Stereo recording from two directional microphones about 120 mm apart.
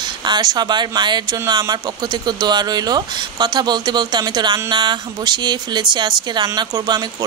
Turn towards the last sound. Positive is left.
turn(degrees=-35)  # may be behind; listen again after turning